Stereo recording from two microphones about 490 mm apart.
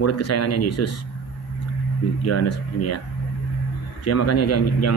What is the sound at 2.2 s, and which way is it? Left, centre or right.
Speech, left.